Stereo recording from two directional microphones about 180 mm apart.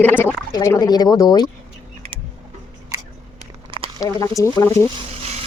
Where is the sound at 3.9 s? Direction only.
20° left (ahead or behind).